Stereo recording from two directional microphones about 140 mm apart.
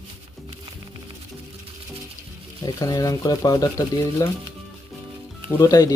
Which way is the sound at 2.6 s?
25° left (ahead or behind).